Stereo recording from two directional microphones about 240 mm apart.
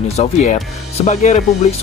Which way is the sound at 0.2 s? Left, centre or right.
Left.